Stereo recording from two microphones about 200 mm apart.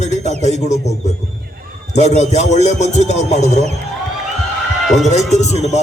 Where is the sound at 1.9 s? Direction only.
35° left (ahead or behind).